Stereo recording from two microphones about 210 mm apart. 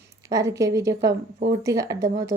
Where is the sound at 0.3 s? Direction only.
15° right (ahead or behind).